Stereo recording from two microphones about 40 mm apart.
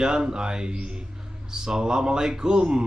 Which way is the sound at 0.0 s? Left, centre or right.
Centre.